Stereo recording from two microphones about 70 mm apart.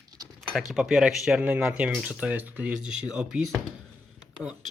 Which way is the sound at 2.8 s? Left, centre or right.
Centre.